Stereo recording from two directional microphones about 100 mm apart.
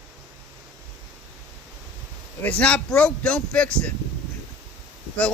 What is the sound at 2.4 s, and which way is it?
Speech, 15° left (ahead or behind).